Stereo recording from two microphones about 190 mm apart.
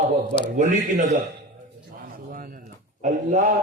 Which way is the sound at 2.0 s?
45° right (ahead or behind).